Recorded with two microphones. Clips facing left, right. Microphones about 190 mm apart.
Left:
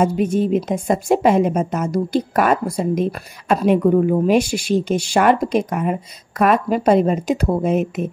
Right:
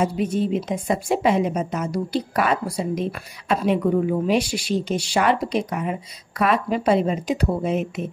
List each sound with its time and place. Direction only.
0.0 s a woman's voice: 50° left (ahead or behind)